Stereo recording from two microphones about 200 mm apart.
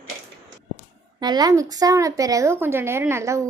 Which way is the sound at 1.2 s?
20° right (ahead or behind).